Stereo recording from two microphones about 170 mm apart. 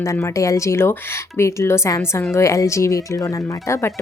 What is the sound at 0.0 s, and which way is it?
Speech, 15° left (ahead or behind).